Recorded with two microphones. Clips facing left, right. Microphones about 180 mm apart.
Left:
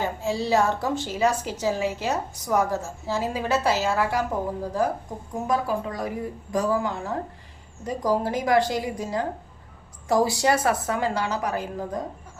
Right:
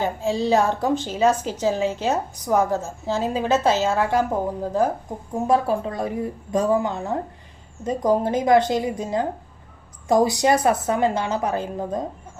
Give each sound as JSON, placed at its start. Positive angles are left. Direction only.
{"t": 0.0, "sound": "speech", "side_deg": -20}